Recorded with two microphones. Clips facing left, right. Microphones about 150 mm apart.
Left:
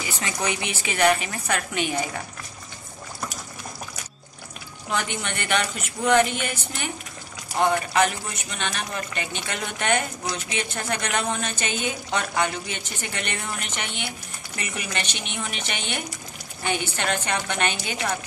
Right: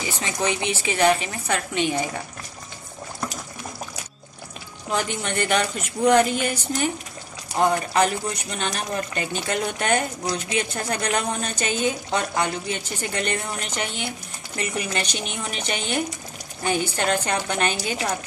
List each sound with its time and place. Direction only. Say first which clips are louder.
0.2 s a woman's voice: right 3 dB; 30° right (ahead or behind)
4.9 s a woman's voice: right 3 dB; 35° right (ahead or behind)
7.9 s a woman's voice: right 2 dB; 35° right (ahead or behind)